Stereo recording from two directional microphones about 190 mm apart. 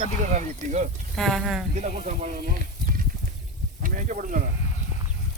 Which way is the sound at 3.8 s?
45° right (ahead or behind).